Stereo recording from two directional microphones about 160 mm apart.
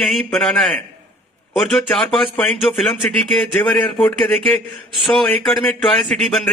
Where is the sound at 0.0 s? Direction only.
Centre (ahead or behind).